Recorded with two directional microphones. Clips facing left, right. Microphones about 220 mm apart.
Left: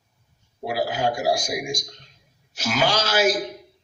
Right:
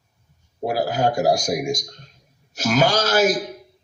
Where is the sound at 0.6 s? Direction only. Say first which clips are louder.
Right 3 dB; 45° right (ahead or behind).